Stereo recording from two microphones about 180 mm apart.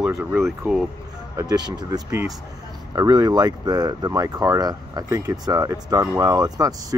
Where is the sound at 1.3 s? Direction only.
25° right (ahead or behind).